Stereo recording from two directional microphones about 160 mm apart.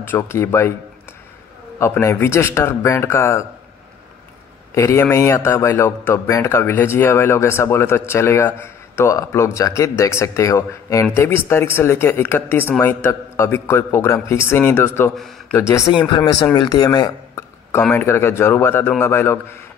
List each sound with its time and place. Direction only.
0.0 s speech: 15° left (ahead or behind)
1.8 s speech: 20° left (ahead or behind)
4.7 s speech: 15° left (ahead or behind)